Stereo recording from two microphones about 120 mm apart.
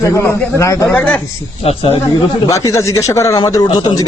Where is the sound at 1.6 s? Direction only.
55° left (ahead or behind).